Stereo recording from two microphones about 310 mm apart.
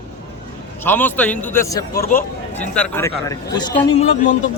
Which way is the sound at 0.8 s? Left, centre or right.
Centre.